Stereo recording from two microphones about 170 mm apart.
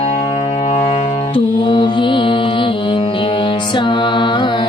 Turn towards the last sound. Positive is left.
turn(degrees=25)  # may be behind; listen again after turning